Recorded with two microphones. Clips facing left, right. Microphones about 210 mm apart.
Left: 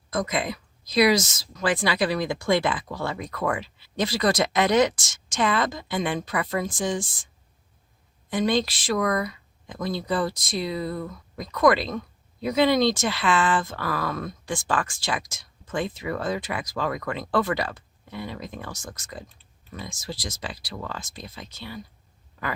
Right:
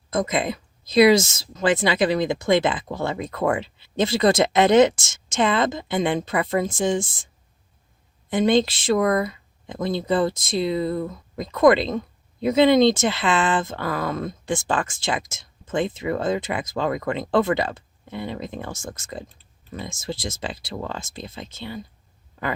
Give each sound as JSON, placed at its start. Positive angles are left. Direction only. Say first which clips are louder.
{"t": 0.1, "sound": "speech", "louder": "right 4 dB", "side_deg": -25}
{"t": 8.3, "sound": "speech", "louder": "right 5 dB", "side_deg": -25}